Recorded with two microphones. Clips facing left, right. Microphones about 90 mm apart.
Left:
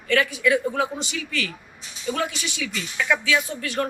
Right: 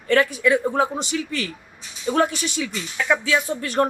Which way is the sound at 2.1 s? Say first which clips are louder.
Right 8 dB; 45° right (ahead or behind).